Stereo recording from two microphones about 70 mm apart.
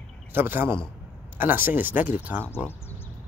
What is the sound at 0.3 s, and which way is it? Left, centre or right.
Speech, right.